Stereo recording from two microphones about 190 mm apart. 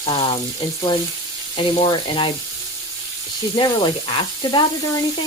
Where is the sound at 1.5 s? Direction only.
25° left (ahead or behind).